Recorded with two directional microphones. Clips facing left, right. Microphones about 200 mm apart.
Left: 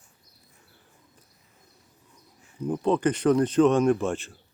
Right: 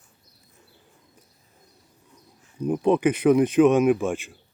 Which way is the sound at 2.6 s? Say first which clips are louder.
Right 3 dB; 15° right (ahead or behind).